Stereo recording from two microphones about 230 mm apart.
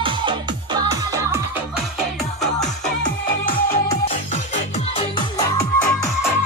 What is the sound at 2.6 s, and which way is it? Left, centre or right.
Music, centre.